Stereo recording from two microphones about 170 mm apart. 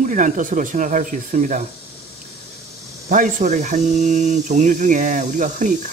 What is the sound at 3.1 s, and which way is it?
Speech, 50° right (ahead or behind).